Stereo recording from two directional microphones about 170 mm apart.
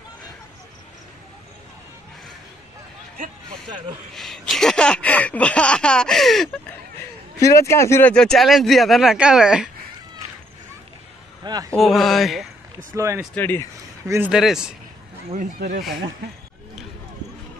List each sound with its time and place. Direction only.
4.1 s speech: centre (ahead or behind)
7.3 s speech: 20° left (ahead or behind); by 9.7 s 5° right (ahead or behind)
11.4 s a man's voice: 20° right (ahead or behind)
11.7 s speech: centre (ahead or behind)
12.9 s speech: 15° right (ahead or behind)
13.3 s speech: 10° left (ahead or behind)
14.0 s speech: 15° right (ahead or behind)
14.3 s speech: 5° right (ahead or behind)